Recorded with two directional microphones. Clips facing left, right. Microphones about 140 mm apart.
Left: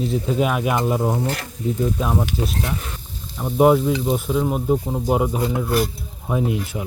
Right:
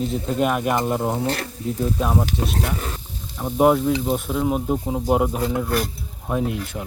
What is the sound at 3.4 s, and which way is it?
Speech, centre (ahead or behind).